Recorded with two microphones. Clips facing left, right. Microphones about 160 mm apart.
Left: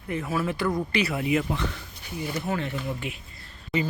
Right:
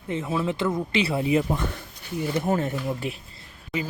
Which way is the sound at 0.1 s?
20° right (ahead or behind).